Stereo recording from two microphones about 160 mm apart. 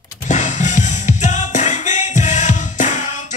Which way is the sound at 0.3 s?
50° left (ahead or behind).